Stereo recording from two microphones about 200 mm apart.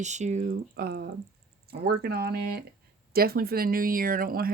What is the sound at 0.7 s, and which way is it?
Speech, 55° right (ahead or behind).